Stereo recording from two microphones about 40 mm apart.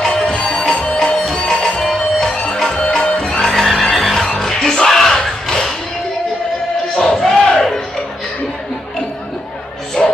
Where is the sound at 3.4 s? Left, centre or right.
Centre.